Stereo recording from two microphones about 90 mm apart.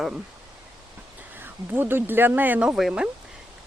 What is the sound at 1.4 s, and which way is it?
Speech, 25° right (ahead or behind).